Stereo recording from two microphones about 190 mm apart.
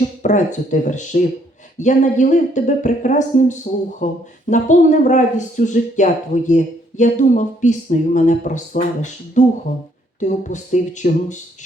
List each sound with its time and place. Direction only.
0.0 s a woman's voice: 40° left (ahead or behind)